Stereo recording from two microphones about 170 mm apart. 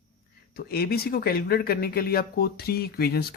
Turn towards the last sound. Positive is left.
turn(degrees=65)  # may be behind; listen again after turning